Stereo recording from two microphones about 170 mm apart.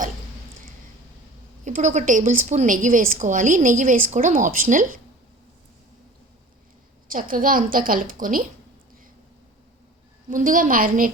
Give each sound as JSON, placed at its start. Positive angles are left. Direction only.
{"t": 1.6, "sound": "a woman's voice", "side_deg": -45}
{"t": 7.1, "sound": "a woman's voice", "side_deg": -55}
{"t": 10.2, "sound": "a woman's voice", "side_deg": -55}